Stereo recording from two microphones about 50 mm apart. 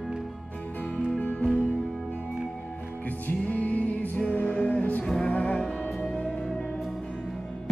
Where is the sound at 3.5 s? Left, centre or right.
Left.